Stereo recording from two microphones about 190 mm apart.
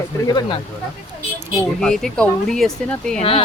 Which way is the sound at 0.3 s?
20° left (ahead or behind).